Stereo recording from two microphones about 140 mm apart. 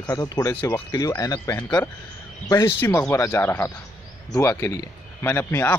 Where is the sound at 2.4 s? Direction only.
25° left (ahead or behind).